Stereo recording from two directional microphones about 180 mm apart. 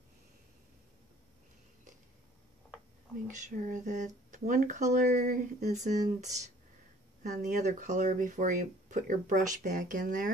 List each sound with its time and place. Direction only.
3.3 s speech: 45° right (ahead or behind)